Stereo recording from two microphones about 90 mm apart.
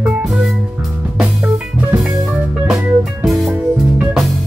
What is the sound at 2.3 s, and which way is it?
Music, 10° right (ahead or behind).